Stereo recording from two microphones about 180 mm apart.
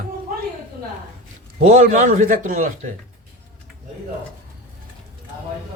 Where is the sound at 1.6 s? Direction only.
45° right (ahead or behind).